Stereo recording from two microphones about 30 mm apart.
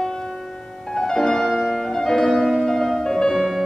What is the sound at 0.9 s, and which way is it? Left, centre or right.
Music, left.